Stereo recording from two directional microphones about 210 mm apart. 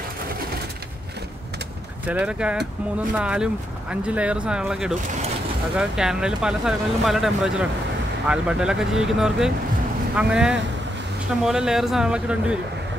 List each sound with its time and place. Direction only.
2.0 s speech: 5° right (ahead or behind)